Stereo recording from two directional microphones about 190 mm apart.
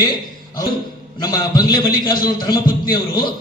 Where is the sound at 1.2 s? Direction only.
20° left (ahead or behind).